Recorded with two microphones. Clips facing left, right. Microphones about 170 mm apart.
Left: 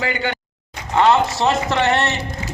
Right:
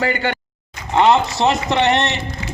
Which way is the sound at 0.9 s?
20° right (ahead or behind).